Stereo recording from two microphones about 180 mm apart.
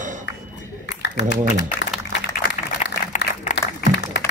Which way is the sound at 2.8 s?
40° left (ahead or behind).